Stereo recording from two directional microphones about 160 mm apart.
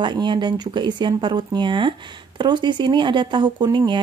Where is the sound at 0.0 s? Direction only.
30° right (ahead or behind).